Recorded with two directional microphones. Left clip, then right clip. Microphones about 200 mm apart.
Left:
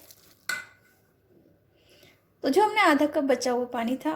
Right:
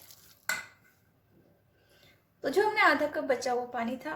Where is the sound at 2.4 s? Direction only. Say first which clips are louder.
Left 4 dB; 30° left (ahead or behind).